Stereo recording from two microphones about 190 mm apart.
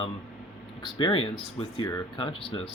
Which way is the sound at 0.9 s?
25° left (ahead or behind).